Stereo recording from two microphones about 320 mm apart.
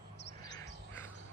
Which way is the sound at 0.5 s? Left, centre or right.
Centre.